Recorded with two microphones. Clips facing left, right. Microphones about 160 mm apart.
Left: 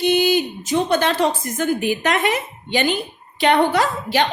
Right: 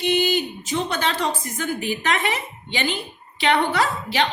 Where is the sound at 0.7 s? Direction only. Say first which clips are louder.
Left 6 dB; 45° left (ahead or behind).